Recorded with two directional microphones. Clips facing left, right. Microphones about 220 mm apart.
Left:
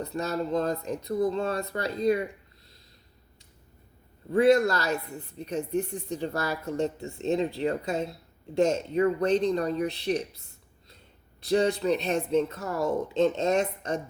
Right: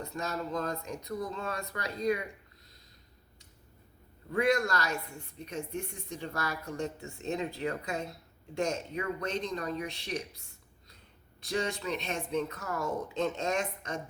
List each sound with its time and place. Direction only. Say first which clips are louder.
0.0 s a woman's voice: left 6 dB; 35° left (ahead or behind)
4.3 s a woman's voice: left 8 dB; 35° left (ahead or behind)
11.4 s a woman's voice: left 9 dB; 35° left (ahead or behind)